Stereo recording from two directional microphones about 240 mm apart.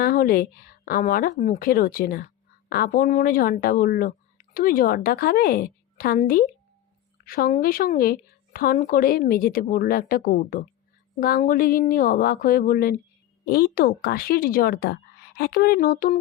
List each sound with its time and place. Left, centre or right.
0.0 s a woman's voice: left